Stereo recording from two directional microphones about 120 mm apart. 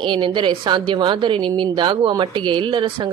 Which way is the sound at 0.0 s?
40° right (ahead or behind).